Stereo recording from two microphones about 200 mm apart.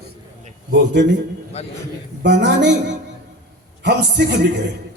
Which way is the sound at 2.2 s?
60° right (ahead or behind).